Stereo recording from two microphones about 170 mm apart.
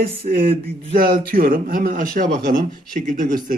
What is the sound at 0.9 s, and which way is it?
Speech, 60° right (ahead or behind).